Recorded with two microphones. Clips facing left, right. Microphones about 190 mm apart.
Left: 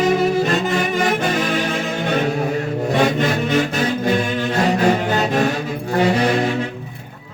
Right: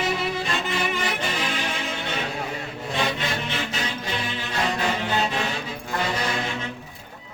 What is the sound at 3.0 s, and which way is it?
Chant, 45° left (ahead or behind).